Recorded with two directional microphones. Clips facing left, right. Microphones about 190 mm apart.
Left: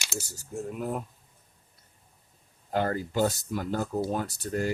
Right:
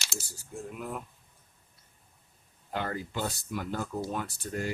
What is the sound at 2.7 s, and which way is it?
Speech, 40° left (ahead or behind).